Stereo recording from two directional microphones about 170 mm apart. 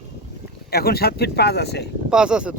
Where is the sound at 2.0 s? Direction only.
5° right (ahead or behind).